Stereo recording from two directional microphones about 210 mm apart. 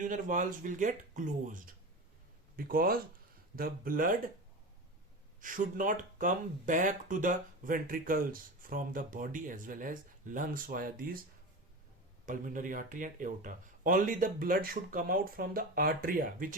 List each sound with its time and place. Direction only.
0.0 s speech: 35° right (ahead or behind)
5.4 s speech: 40° right (ahead or behind)
12.2 s speech: 40° right (ahead or behind)